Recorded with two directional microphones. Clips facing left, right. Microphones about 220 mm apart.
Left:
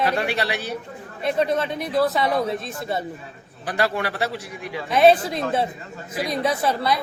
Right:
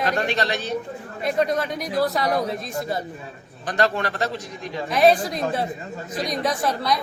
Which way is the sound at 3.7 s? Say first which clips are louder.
Right 1 dB; 10° left (ahead or behind).